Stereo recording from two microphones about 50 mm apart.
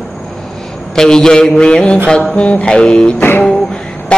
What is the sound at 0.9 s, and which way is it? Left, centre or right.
Mantra, centre.